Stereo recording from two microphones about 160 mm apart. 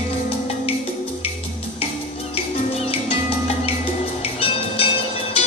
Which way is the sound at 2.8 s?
40° left (ahead or behind).